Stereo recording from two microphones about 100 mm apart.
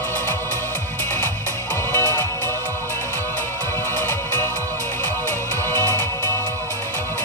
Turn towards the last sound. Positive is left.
turn(degrees=25)  # may be behind; listen again after turning